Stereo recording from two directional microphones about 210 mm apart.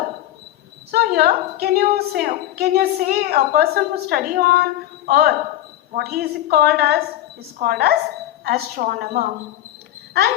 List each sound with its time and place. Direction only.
0.9 s a woman's voice: 45° right (ahead or behind)